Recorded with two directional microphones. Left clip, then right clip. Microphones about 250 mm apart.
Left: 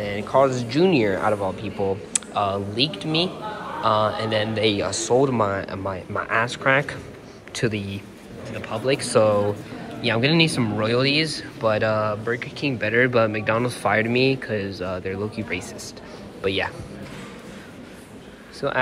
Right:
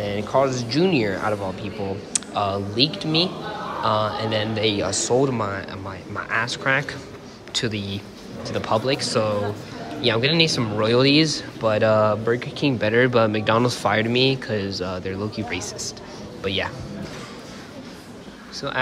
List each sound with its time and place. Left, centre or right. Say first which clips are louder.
0.0 s speech: left 1 dB; centre
8.8 s speech: left 3 dB; centre